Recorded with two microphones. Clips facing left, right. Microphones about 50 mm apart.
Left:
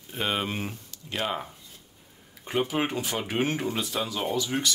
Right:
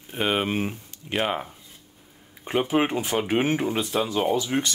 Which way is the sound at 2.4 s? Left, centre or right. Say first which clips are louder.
Right 4 dB; centre.